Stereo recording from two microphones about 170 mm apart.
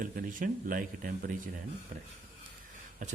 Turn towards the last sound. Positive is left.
turn(degrees=-50)  # may be behind; listen again after turning